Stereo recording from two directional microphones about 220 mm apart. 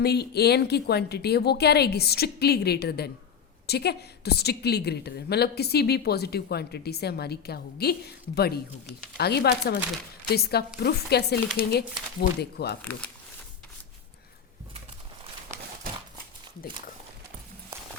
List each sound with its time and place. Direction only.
0.0 s a woman's voice: 45° left (ahead or behind)
12.8 s speech: 5° left (ahead or behind)